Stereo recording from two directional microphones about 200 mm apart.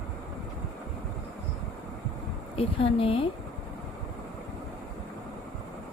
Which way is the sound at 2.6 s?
25° left (ahead or behind).